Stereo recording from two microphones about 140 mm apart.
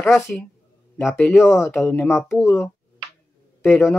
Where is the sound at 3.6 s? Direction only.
15° left (ahead or behind).